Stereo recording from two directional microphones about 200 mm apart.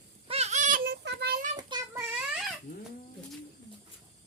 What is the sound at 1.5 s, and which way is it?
Child singing, 20° right (ahead or behind).